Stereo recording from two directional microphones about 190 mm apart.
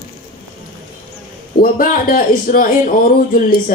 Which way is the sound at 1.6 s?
50° left (ahead or behind).